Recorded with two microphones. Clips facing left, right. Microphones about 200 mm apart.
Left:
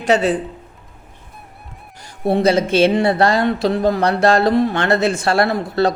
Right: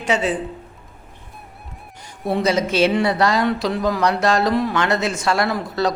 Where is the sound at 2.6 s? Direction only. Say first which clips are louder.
Left 3 dB; 30° left (ahead or behind).